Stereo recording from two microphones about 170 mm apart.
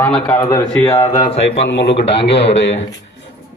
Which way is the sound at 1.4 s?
90° left.